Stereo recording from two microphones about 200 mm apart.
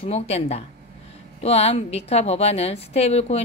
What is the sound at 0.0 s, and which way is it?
A woman's voice, 30° left (ahead or behind).